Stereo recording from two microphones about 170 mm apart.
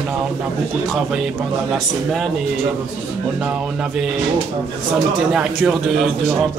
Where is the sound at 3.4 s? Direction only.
5° right (ahead or behind).